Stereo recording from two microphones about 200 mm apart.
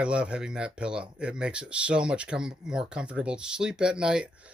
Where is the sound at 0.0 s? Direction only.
5° right (ahead or behind).